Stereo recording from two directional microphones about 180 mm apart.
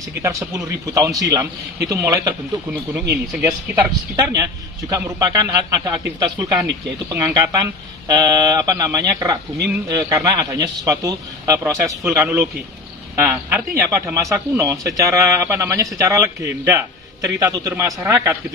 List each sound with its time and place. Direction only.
0.2 s speech: 15° right (ahead or behind)
2.9 s speech: 5° right (ahead or behind)
4.2 s a man's voice: 20° right (ahead or behind)